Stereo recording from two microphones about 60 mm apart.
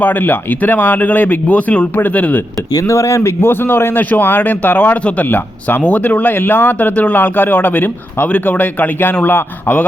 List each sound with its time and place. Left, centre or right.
0.0 s speech: left
2.7 s speech: left
3.4 s speech: left